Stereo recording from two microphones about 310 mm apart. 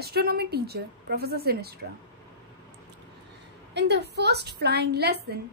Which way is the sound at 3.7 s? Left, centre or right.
Right.